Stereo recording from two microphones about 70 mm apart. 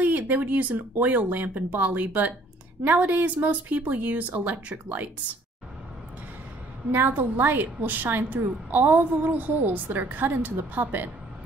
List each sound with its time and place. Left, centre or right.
0.0 s a woman's voice: right
6.9 s a woman's voice: right